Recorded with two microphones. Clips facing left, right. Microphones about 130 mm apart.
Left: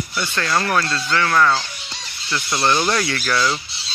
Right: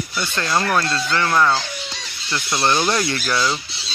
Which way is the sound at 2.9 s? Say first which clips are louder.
Even; 20° right (ahead or behind).